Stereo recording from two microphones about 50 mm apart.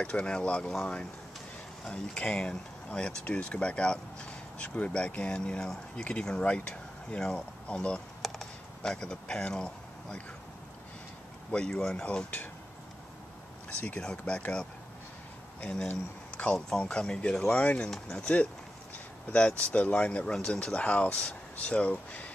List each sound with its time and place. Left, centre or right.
0.0 s speech: left
1.9 s speech: centre
8.2 s computer keyboard: centre
8.8 s speech: centre
11.5 s speech: centre
13.7 s speech: left
14.0 s speech: centre
15.6 s speech: centre
18.1 s speech: left